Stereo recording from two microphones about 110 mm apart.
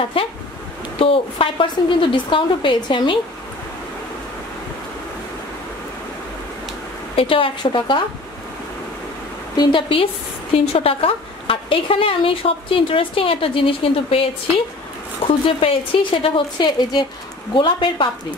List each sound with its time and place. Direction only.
0.2 s a woman's voice: 55° left (ahead or behind)
7.2 s a woman's voice: 55° left (ahead or behind)
9.6 s a woman's voice: 50° left (ahead or behind)
10.6 s speech: 60° left (ahead or behind)
15.4 s a woman's voice: 55° left (ahead or behind)